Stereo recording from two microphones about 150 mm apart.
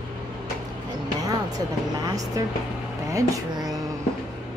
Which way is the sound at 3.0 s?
20° right (ahead or behind).